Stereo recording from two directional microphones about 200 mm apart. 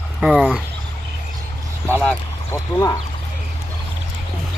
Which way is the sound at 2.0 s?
10° left (ahead or behind).